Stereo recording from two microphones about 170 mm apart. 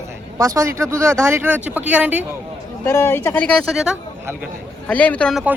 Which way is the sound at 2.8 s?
15° left (ahead or behind).